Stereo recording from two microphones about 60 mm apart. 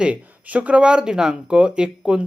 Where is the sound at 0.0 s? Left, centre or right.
Right.